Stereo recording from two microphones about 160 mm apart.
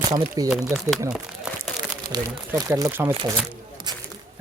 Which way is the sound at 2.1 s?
20° right (ahead or behind).